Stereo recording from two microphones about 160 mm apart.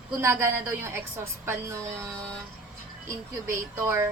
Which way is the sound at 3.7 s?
15° right (ahead or behind).